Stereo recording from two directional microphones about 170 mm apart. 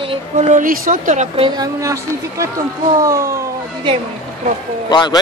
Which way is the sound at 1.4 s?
20° right (ahead or behind).